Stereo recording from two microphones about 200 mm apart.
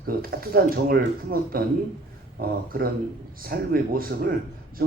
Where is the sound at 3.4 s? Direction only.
45° right (ahead or behind).